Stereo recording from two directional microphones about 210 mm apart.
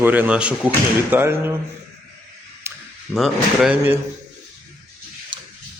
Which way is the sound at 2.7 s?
10° right (ahead or behind).